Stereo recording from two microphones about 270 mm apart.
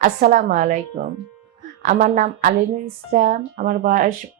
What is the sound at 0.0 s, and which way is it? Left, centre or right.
A woman's voice, right.